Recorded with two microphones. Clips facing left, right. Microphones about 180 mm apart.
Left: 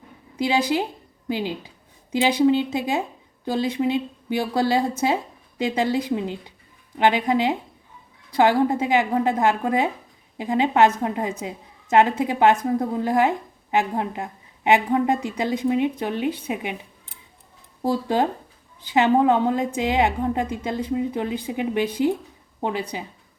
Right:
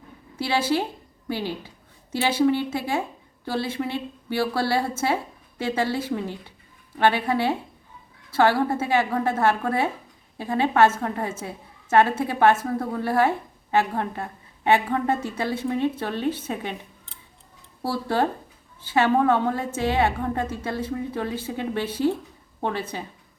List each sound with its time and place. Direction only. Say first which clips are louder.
0.3 s a woman's voice: left 2 dB; 15° left (ahead or behind)
17.8 s a woman's voice: left 2 dB; 15° left (ahead or behind)